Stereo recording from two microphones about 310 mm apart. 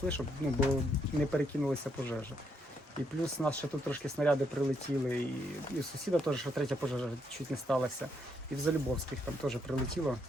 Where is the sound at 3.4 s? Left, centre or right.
Centre.